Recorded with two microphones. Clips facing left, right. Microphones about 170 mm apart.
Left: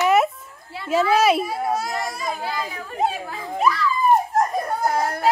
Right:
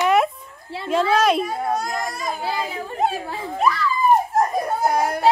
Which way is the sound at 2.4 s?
25° right (ahead or behind).